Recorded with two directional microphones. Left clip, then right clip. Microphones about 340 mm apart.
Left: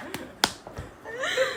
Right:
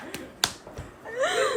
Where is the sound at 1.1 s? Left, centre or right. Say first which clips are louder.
Right 2 dB; centre.